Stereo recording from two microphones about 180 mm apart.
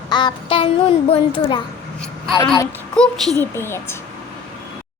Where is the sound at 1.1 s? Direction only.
30° left (ahead or behind).